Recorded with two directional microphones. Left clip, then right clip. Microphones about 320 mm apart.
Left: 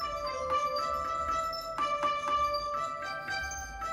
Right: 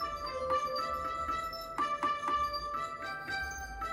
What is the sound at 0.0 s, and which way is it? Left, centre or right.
Music, centre.